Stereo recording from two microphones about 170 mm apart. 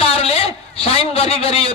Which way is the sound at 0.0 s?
35° left (ahead or behind).